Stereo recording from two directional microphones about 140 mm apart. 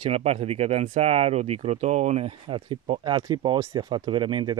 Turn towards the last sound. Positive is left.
turn(degrees=-35)  # may be behind; listen again after turning